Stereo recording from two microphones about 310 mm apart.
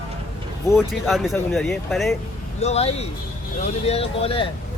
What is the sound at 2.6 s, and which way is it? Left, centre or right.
Speech, left.